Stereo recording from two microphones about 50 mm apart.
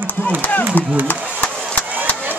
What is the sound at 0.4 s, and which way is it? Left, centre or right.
Speech, left.